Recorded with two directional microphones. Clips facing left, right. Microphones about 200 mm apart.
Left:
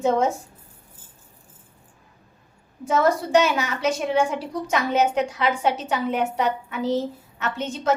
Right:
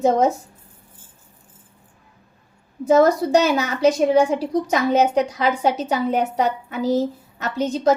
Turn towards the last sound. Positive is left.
turn(degrees=-35)  # may be behind; listen again after turning